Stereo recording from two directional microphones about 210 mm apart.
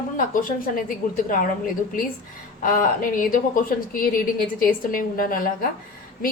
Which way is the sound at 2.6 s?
40° left (ahead or behind).